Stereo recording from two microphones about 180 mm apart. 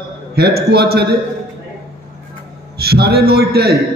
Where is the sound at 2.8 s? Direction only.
60° right (ahead or behind).